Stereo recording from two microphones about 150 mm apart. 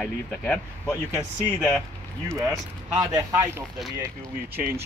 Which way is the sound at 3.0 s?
15° right (ahead or behind).